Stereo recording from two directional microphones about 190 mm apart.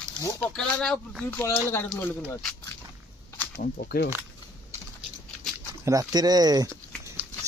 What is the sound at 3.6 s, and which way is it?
Speech, 50° left (ahead or behind).